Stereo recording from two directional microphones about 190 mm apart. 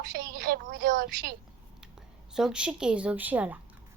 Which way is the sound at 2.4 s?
5° right (ahead or behind).